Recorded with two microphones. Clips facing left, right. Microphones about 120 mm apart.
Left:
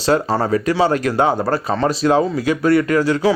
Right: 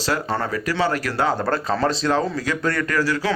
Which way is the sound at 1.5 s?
5° left (ahead or behind).